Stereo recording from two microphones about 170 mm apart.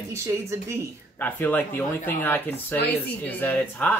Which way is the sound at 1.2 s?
10° left (ahead or behind).